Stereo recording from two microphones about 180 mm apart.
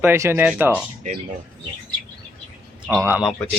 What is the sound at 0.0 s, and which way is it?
Speech, 15° right (ahead or behind).